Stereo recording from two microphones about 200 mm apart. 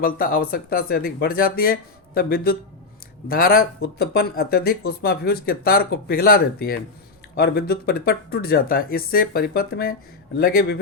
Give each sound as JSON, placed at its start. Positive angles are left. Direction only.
{"t": 0.0, "sound": "speech", "side_deg": 45}